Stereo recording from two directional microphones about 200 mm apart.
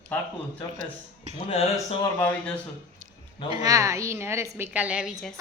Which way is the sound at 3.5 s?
20° right (ahead or behind).